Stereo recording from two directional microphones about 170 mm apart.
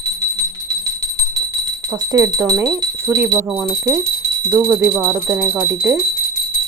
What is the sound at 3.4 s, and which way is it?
Speech, 5° right (ahead or behind).